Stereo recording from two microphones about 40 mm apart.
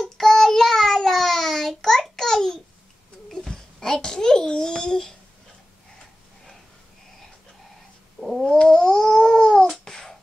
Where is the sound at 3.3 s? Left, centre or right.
Centre.